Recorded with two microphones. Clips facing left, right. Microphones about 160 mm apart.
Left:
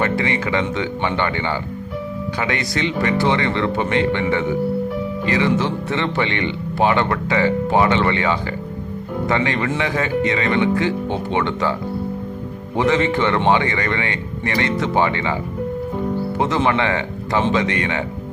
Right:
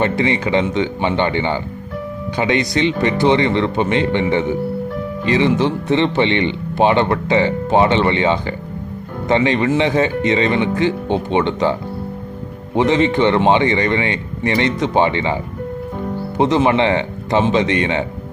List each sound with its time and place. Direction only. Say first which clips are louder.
0.0 s speech: right 3 dB; 20° right (ahead or behind)
12.7 s speech: right 3 dB; 20° right (ahead or behind)
16.4 s speech: right 6 dB; 20° right (ahead or behind)